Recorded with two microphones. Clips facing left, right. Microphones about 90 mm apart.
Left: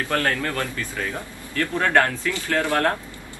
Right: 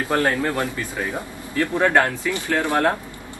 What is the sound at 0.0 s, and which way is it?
A man's voice, 20° right (ahead or behind).